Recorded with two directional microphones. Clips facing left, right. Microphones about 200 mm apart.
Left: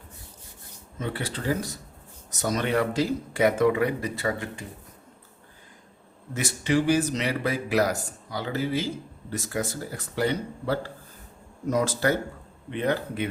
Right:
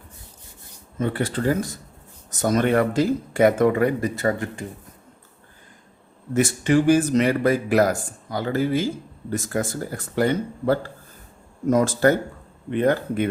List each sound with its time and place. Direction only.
0.9 s a man's voice: 50° right (ahead or behind)
6.3 s a man's voice: 50° right (ahead or behind)